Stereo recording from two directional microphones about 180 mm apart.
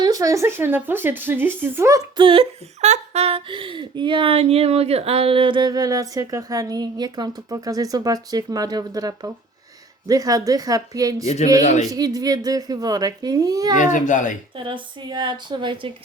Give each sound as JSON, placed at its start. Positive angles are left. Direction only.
{"t": 0.0, "sound": "speech", "side_deg": -20}
{"t": 2.2, "sound": "speech", "side_deg": -30}
{"t": 11.6, "sound": "a man's voice", "side_deg": 40}
{"t": 11.9, "sound": "speech", "side_deg": -20}
{"t": 13.7, "sound": "speech", "side_deg": 45}
{"t": 14.5, "sound": "speech", "side_deg": -30}